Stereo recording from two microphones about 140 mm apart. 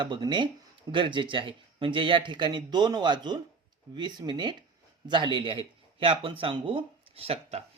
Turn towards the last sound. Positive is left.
turn(degrees=-45)  # may be behind; listen again after turning